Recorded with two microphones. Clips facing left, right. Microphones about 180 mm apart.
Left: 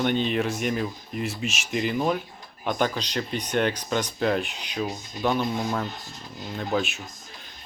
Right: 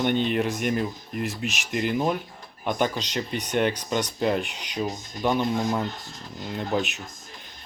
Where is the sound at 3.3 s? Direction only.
15° right (ahead or behind).